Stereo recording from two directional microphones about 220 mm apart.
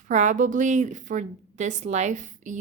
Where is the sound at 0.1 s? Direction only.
35° right (ahead or behind).